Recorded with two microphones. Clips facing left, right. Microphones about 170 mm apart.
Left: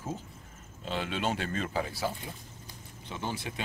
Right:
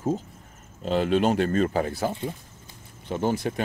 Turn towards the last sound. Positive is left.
turn(degrees=-45)  # may be behind; listen again after turning